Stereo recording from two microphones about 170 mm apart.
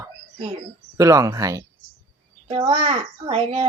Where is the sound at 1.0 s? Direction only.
20° right (ahead or behind).